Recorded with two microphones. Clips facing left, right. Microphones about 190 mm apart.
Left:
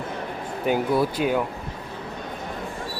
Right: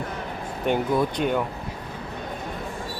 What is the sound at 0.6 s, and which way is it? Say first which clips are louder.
Speech: left 1 dB; 5° left (ahead or behind).